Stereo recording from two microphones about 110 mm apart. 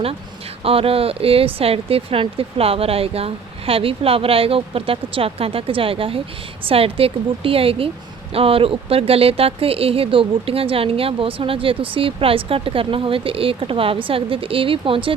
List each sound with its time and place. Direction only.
0.6 s speech: 60° right (ahead or behind)